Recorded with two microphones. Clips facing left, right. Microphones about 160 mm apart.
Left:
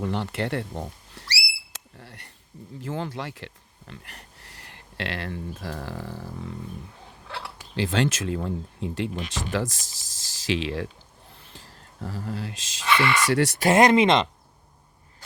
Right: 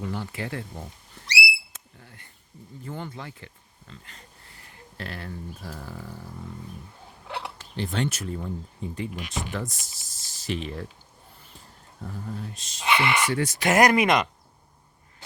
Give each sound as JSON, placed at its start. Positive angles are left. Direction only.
{"t": 0.0, "sound": "speech", "side_deg": 70}
{"t": 1.7, "sound": "a sound", "side_deg": 70}
{"t": 2.8, "sound": "speech", "side_deg": 80}
{"t": 7.3, "sound": "a sound", "side_deg": -20}
{"t": 7.8, "sound": "speech", "side_deg": 90}
{"t": 12.8, "sound": "speech", "side_deg": -15}
{"t": 13.2, "sound": "speech", "side_deg": 80}
{"t": 13.6, "sound": "speech", "side_deg": 30}